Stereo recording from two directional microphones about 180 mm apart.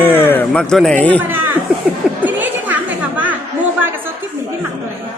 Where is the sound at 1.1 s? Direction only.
10° right (ahead or behind).